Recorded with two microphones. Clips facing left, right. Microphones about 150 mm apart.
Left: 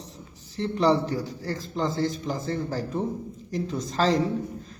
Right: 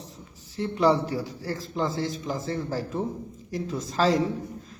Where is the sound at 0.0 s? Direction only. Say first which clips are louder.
Left 1 dB; centre (ahead or behind).